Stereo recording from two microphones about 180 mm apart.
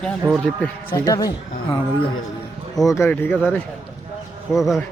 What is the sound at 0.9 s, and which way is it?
Speech, 20° left (ahead or behind).